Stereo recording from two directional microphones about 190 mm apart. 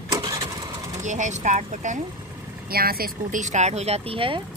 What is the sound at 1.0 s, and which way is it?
Speech, 40° right (ahead or behind).